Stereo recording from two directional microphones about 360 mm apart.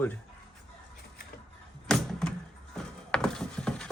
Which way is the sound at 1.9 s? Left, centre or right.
Centre.